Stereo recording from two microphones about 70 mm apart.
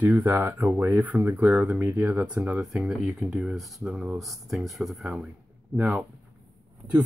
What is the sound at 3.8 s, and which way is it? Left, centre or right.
Speech, centre.